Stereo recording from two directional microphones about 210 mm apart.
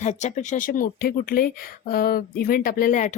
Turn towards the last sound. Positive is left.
turn(degrees=40)  # may be behind; listen again after turning